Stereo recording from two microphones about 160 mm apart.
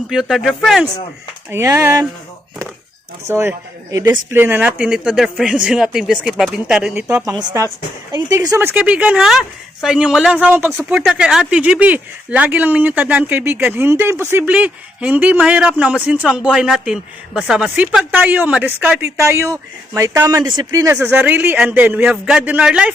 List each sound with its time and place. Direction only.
0.1 s speech: centre (ahead or behind)
1.5 s speech: 15° right (ahead or behind)
3.2 s speech: 15° right (ahead or behind)
7.3 s a woman's voice: 20° right (ahead or behind)